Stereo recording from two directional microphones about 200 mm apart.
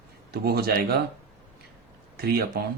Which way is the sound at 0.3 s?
50° right (ahead or behind).